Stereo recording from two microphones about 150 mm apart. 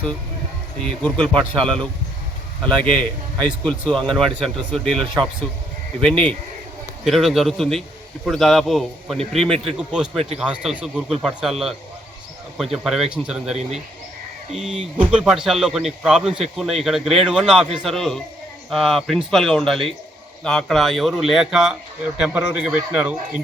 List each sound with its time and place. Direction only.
1.0 s a man's voice: 5° left (ahead or behind)
13.6 s speech: 45° right (ahead or behind)
14.5 s a man's voice: 5° right (ahead or behind)